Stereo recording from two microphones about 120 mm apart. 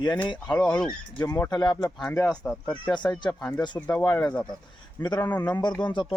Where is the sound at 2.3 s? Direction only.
10° left (ahead or behind).